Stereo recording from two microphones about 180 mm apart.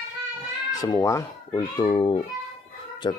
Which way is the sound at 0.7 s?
20° left (ahead or behind).